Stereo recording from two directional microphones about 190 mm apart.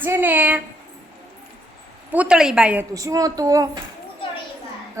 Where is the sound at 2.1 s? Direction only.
5° right (ahead or behind).